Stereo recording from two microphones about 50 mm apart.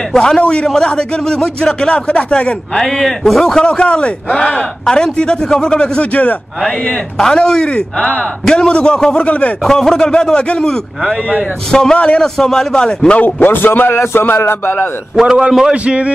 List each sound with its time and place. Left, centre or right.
0.1 s a man's voice: centre
2.7 s a man's voice: centre
3.6 s a man's voice: left
7.2 s a man's voice: centre
11.0 s speech: centre
11.7 s a man's voice: centre
13.2 s a man's voice: left
13.9 s a sound: left
14.2 s speech: left
15.1 s speech: centre
15.7 s a man's voice: right